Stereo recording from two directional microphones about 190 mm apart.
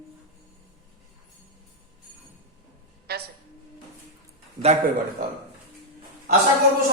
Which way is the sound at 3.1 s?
55° right (ahead or behind).